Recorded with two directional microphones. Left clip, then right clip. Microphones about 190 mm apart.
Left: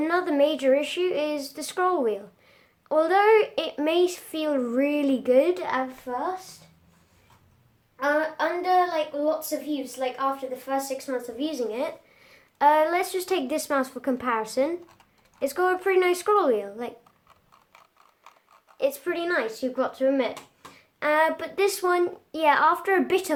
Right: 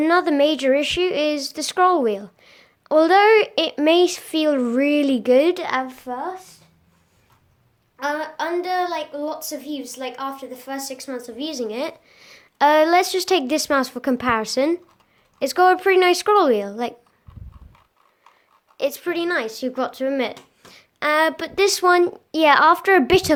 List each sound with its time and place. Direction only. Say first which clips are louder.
0.0 s speech: right 6 dB; 40° right (ahead or behind)
7.9 s a woman's voice: even; 45° right (ahead or behind)
18.8 s a woman's voice: right 3 dB; 40° right (ahead or behind)